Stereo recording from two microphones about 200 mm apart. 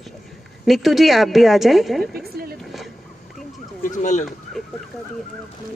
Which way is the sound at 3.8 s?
40° left (ahead or behind).